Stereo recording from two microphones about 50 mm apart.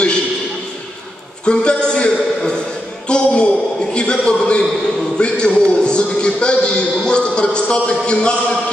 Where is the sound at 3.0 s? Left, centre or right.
Centre.